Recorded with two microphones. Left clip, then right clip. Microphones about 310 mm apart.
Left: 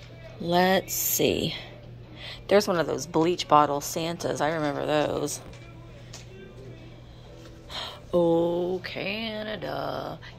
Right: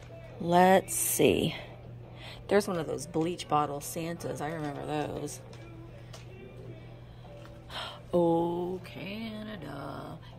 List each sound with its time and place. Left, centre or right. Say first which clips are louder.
0.5 s speech: even; centre
7.7 s speech: left 4 dB; centre